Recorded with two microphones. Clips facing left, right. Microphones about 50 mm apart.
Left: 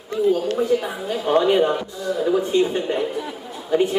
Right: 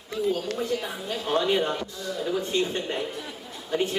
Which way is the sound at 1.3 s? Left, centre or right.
Left.